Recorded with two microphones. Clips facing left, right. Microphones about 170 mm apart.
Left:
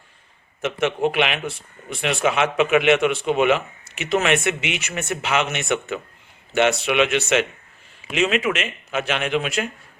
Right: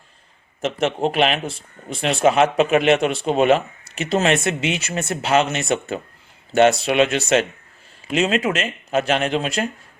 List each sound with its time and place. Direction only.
0.6 s speech: 35° right (ahead or behind)